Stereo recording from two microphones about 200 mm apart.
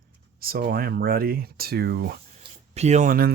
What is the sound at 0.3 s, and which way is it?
Speech, 50° right (ahead or behind).